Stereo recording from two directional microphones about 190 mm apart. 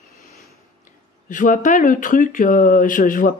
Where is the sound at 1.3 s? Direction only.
45° left (ahead or behind).